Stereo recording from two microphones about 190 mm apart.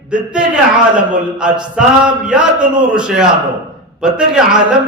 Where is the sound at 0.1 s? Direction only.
5° right (ahead or behind).